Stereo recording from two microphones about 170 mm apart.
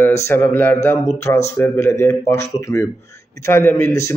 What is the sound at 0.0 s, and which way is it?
A man's voice, 15° left (ahead or behind).